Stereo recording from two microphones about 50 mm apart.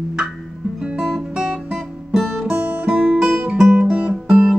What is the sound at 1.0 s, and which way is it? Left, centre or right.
Guitar, centre.